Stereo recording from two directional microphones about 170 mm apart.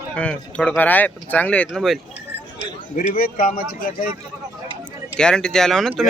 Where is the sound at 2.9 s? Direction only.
55° left (ahead or behind).